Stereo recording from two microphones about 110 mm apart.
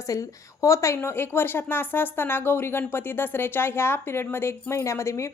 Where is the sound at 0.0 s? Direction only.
30° left (ahead or behind).